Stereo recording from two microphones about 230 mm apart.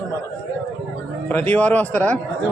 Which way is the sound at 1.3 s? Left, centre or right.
Centre.